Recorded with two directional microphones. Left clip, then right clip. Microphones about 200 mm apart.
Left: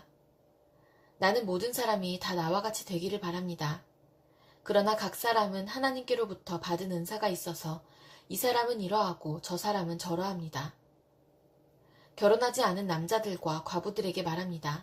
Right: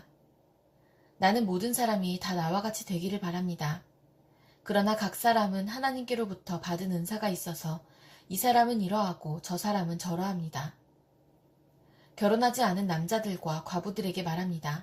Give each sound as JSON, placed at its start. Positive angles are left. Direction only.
{"t": 1.2, "sound": "speech", "side_deg": 40}
{"t": 12.3, "sound": "speech", "side_deg": 40}